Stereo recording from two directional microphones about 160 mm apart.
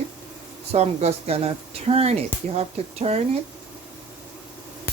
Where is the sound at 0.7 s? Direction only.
40° right (ahead or behind).